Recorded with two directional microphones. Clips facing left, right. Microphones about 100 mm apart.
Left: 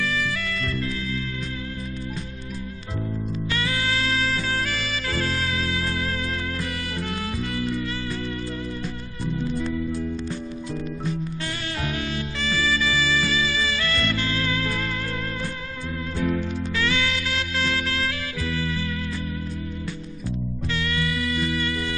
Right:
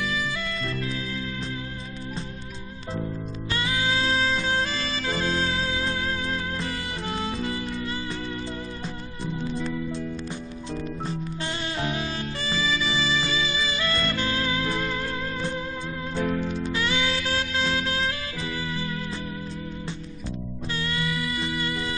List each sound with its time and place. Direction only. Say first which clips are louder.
0.0 s music: left 2 dB; 20° right (ahead or behind)
3.5 s music: right 1 dB; 20° right (ahead or behind)
7.2 s music: even; 25° right (ahead or behind)
11.8 s music: left 1 dB; 25° right (ahead or behind)
16.7 s music: left 2 dB; 25° right (ahead or behind)
20.2 s music: left 4 dB; 25° right (ahead or behind)